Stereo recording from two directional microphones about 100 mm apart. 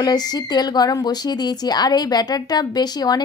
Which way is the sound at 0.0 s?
40° left (ahead or behind).